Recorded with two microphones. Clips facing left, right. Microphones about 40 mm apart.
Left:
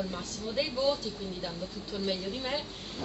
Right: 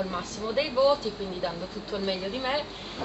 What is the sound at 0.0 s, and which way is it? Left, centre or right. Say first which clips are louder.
Speech: right 5 dB; right.